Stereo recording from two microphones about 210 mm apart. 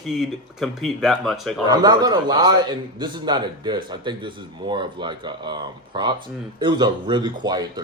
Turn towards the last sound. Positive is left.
turn(degrees=-20)  # may be behind; listen again after turning